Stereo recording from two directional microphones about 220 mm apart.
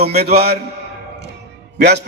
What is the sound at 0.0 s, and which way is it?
Speech, 45° right (ahead or behind).